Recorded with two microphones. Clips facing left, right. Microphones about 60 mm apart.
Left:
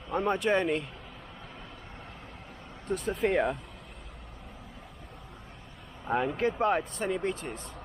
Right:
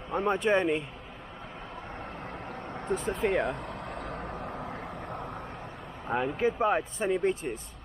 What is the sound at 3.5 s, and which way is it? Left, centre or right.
Vehicle, right.